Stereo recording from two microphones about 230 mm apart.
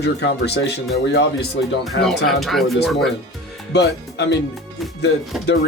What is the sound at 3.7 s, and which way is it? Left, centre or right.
Speech, left.